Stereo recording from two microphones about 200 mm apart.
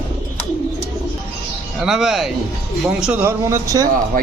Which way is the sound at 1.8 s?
Centre (ahead or behind).